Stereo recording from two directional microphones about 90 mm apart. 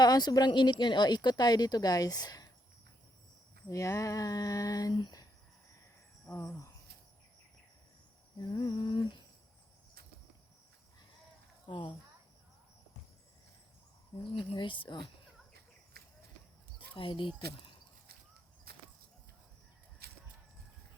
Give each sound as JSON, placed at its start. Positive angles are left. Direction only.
{"t": 0.0, "sound": "speech", "side_deg": 50}
{"t": 3.7, "sound": "a sound", "side_deg": 35}
{"t": 4.9, "sound": "speech", "side_deg": 60}
{"t": 6.4, "sound": "a sound", "side_deg": 35}
{"t": 8.4, "sound": "humming", "side_deg": 50}
{"t": 11.7, "sound": "humming", "side_deg": 65}
{"t": 14.3, "sound": "humming", "side_deg": 65}
{"t": 16.9, "sound": "humming", "side_deg": 70}